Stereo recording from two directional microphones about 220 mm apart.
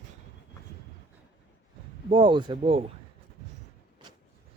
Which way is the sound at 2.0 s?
25° right (ahead or behind).